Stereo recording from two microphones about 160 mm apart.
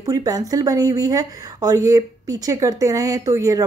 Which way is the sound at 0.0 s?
20° right (ahead or behind).